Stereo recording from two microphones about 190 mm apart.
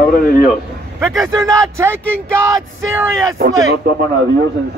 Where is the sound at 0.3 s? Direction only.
50° left (ahead or behind).